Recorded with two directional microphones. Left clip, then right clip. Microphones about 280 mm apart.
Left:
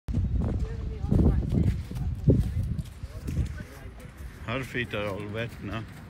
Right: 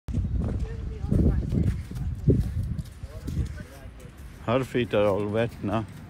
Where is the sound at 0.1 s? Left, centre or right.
Left.